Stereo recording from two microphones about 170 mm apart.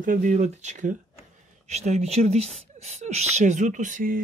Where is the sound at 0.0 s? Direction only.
50° right (ahead or behind).